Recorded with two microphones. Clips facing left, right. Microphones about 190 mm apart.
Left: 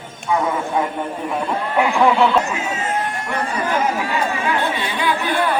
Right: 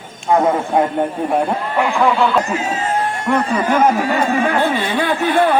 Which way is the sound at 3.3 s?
50° right (ahead or behind).